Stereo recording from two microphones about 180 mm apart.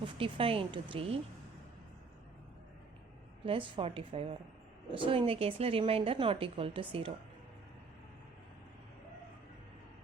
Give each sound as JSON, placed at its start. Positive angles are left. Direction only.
{"t": 0.0, "sound": "speech", "side_deg": -30}
{"t": 3.4, "sound": "a woman's voice", "side_deg": -30}